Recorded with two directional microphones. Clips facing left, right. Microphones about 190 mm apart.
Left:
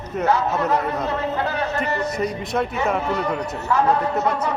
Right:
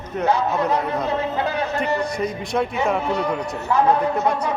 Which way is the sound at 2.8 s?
5° left (ahead or behind).